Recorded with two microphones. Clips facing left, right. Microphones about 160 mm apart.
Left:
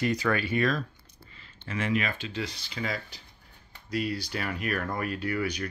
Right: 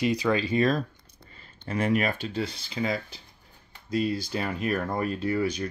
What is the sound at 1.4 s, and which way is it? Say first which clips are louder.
Speech: right 5 dB; 40° right (ahead or behind).